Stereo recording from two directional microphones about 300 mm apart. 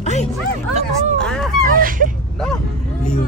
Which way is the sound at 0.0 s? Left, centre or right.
Left.